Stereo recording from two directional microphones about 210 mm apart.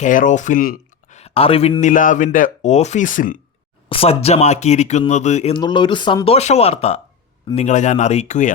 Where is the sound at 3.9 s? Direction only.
25° left (ahead or behind).